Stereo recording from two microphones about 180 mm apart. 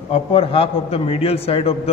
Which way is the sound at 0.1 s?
30° left (ahead or behind).